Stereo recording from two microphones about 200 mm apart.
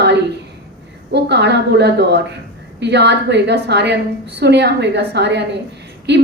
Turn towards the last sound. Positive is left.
turn(degrees=-60)  # may be behind; listen again after turning